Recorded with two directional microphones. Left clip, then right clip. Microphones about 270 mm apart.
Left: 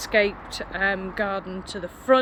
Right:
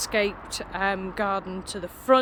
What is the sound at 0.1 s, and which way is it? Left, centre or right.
Speech, centre.